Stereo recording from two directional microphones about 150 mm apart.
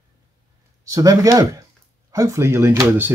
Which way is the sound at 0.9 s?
20° right (ahead or behind).